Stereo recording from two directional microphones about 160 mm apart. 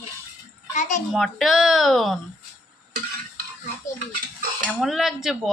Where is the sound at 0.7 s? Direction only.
50° left (ahead or behind).